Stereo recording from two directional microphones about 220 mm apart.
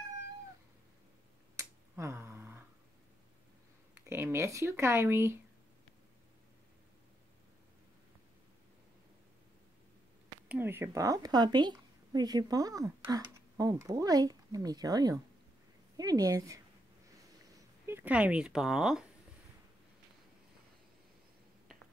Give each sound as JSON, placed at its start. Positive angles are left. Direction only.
{"t": 1.6, "sound": "a sound", "side_deg": -15}
{"t": 4.0, "sound": "a woman's voice", "side_deg": -10}
{"t": 10.5, "sound": "a woman's voice", "side_deg": -10}
{"t": 17.8, "sound": "speech", "side_deg": -10}